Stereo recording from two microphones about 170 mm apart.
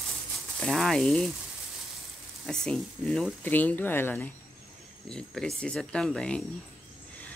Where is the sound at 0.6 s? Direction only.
Centre (ahead or behind).